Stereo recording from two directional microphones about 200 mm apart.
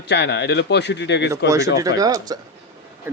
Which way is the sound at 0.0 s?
60° left (ahead or behind).